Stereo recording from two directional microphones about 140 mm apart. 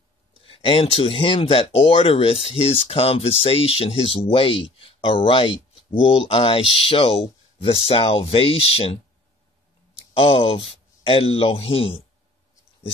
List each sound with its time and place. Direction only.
0.4 s speech: 40° left (ahead or behind)
9.9 s speech: 40° left (ahead or behind)